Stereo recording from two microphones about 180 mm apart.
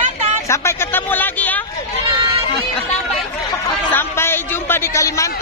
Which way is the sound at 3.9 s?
10° left (ahead or behind).